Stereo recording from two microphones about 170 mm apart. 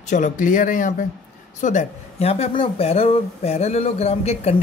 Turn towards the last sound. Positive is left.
turn(degrees=40)  # may be behind; listen again after turning